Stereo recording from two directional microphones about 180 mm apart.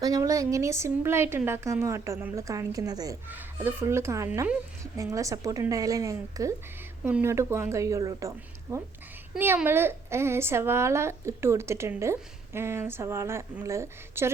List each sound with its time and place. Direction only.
0.0 s a woman's voice: 20° right (ahead or behind)
3.2 s a woman's voice: 10° right (ahead or behind)